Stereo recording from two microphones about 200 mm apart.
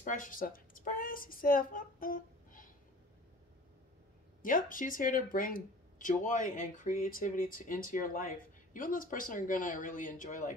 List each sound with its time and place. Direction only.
0.0 s a woman's voice: 40° left (ahead or behind)
4.4 s speech: 45° left (ahead or behind)